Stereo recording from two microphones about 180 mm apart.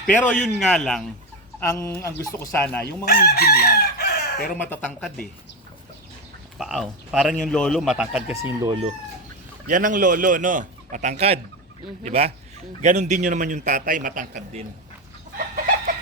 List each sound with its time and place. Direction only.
0.1 s speech: 10° left (ahead or behind)
1.5 s speech: 15° left (ahead or behind)
2.8 s chicken: 60° left (ahead or behind)
4.4 s speech: 10° left (ahead or behind)
6.6 s speech: centre (ahead or behind)
8.4 s speech: 15° right (ahead or behind)
9.6 s a man's voice: 45° right (ahead or behind)
15.4 s chicken: 50° right (ahead or behind)